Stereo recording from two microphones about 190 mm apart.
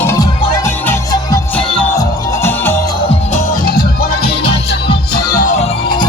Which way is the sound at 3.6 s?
50° left (ahead or behind).